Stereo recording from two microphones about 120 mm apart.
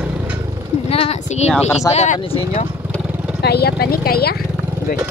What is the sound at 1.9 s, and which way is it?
Speech, 80° left.